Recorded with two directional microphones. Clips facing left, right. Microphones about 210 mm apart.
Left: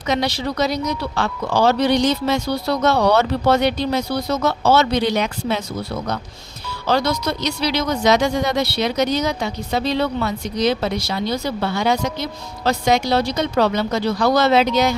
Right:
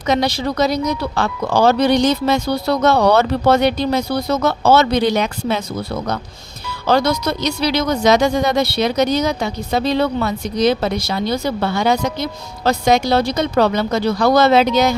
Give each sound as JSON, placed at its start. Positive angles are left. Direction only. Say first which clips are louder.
{"t": 0.1, "sound": "speech", "louder": "right 3 dB", "side_deg": -45}
{"t": 6.8, "sound": "speech", "louder": "right 3 dB", "side_deg": -50}